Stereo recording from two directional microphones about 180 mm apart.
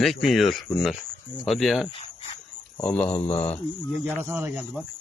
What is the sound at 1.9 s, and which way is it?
Cricket, 35° left (ahead or behind).